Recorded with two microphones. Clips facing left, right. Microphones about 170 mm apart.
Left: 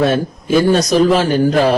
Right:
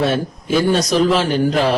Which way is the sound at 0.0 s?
45° left (ahead or behind).